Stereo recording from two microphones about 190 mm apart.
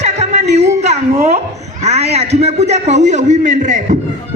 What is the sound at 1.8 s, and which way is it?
A man's voice, 35° right (ahead or behind).